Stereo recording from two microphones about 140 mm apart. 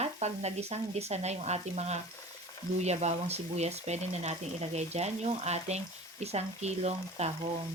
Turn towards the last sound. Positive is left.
turn(degrees=-50)  # may be behind; listen again after turning